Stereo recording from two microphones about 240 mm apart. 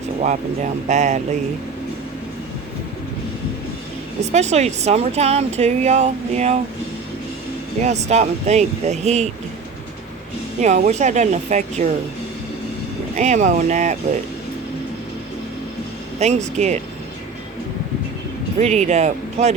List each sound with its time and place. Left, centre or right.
0.2 s speech: right
4.3 s speech: right
7.8 s speech: right
10.6 s speech: right
13.1 s speech: right
16.2 s speech: right
18.6 s speech: right